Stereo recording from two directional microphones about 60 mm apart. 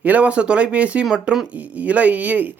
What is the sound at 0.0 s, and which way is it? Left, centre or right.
Speech, right.